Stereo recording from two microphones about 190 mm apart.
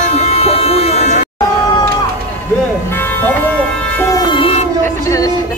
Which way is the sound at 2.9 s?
10° left (ahead or behind).